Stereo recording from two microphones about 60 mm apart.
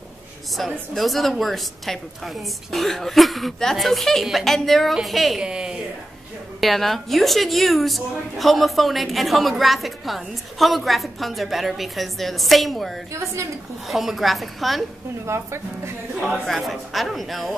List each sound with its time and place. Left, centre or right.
0.5 s a woman's voice: centre
5.4 s a woman's voice: centre
6.6 s a woman's voice: centre
13.2 s a woman's voice: right
13.8 s a woman's voice: centre
15.2 s speech: right
16.2 s a woman's voice: centre